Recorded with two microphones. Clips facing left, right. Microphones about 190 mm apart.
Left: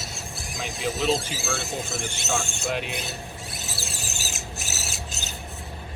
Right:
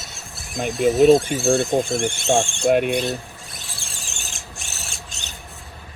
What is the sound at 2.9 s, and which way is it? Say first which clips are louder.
Rodents: right 11 dB; centre (ahead or behind).